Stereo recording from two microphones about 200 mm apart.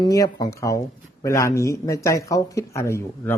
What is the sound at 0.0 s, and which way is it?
A woman's voice, 20° left (ahead or behind).